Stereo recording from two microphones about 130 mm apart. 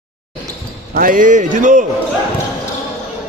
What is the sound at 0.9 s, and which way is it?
Speech, 90° right.